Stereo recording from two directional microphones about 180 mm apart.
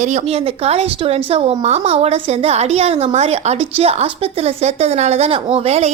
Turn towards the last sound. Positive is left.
turn(degrees=-35)  # may be behind; listen again after turning